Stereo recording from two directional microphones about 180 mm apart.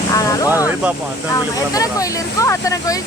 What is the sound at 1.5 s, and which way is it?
Speech, 20° left (ahead or behind).